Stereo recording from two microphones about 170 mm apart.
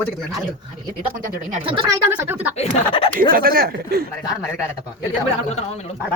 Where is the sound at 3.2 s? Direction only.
55° right (ahead or behind).